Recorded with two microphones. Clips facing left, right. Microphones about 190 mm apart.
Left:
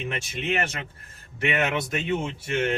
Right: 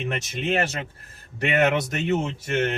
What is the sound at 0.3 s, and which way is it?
A man's voice, 35° right (ahead or behind).